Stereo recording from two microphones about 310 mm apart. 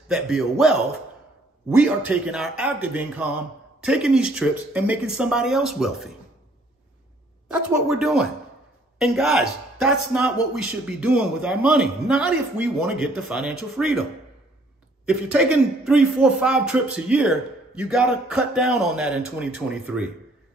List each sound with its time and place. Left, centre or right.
0.1 s a man's voice: centre
1.8 s a man's voice: centre
7.4 s a man's voice: centre
15.0 s a man's voice: centre